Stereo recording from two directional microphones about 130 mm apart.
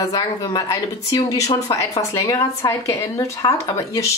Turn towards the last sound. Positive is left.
turn(degrees=20)  # may be behind; listen again after turning